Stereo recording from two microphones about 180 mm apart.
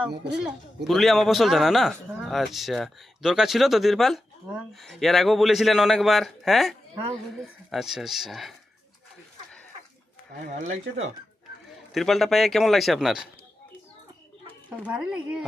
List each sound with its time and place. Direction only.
0.1 s speech: 70° right (ahead or behind)
0.9 s a man's voice: centre (ahead or behind)
11.9 s a man's voice: centre (ahead or behind)
14.8 s a man's voice: 5° right (ahead or behind)